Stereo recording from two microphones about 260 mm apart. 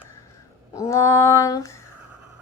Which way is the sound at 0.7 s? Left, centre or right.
Centre.